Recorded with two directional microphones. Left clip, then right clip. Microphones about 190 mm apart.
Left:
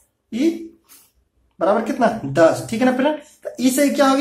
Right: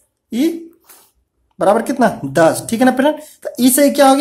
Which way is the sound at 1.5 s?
40° right (ahead or behind).